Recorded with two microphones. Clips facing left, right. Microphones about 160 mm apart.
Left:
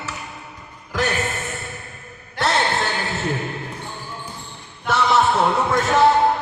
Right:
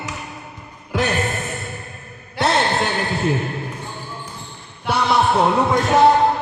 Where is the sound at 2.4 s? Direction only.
20° right (ahead or behind).